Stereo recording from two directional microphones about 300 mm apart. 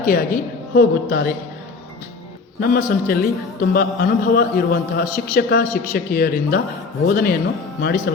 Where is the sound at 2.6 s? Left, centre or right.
Left.